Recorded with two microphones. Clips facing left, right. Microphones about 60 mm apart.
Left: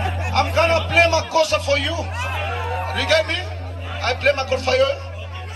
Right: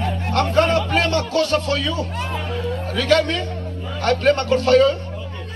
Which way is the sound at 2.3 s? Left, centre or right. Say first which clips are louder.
Even; left.